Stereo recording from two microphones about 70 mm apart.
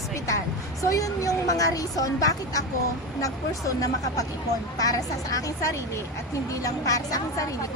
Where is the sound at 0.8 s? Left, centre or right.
Left.